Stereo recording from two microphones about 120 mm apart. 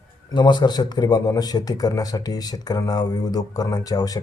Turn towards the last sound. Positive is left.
turn(degrees=30)  # may be behind; listen again after turning